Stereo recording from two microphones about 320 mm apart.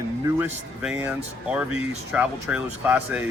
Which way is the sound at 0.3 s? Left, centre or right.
Centre.